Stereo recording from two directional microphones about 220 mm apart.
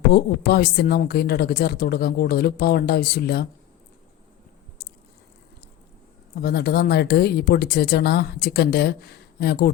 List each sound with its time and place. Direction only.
0.1 s speech: 45° left (ahead or behind)
6.3 s speech: 45° left (ahead or behind)